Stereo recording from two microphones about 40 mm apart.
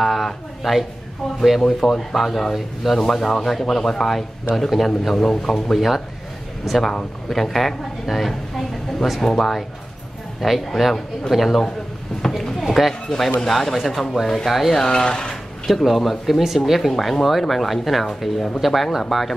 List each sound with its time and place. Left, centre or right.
0.0 s a sound: centre
1.6 s speech: centre
10.8 s speech: centre
14.7 s speech: centre
15.6 s speech: centre